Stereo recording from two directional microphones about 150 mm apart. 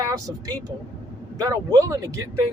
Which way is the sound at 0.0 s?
25° right (ahead or behind).